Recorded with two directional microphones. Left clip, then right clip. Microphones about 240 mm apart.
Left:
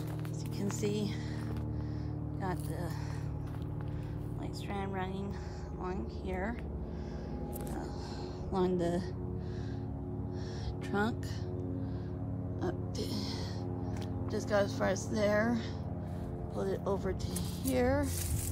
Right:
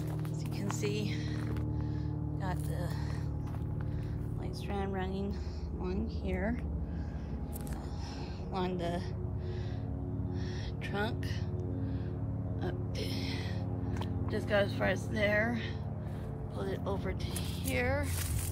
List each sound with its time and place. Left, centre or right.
0.7 s music: centre
6.2 s a woman's voice: centre
8.5 s speech: centre
10.9 s speech: centre
12.6 s music: centre
14.3 s speech: centre